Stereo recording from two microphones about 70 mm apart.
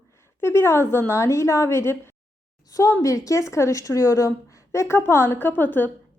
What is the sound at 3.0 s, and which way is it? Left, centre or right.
A woman's voice, left.